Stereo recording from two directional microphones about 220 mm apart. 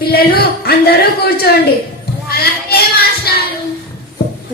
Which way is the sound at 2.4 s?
45° left (ahead or behind).